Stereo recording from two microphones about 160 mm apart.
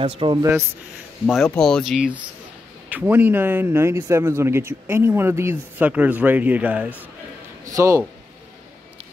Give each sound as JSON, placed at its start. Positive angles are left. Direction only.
{"t": 0.0, "sound": "speech", "side_deg": -35}
{"t": 0.4, "sound": "a man's voice", "side_deg": -15}
{"t": 1.2, "sound": "a man's voice", "side_deg": 0}
{"t": 7.6, "sound": "speech", "side_deg": -20}